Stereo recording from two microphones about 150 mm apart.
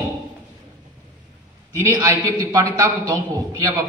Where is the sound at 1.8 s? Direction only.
20° right (ahead or behind).